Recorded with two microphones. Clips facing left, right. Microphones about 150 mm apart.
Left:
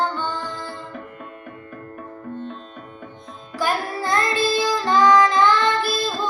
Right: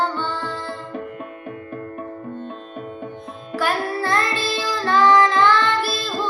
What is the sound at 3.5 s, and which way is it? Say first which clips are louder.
Music: right 1 dB; 15° left (ahead or behind).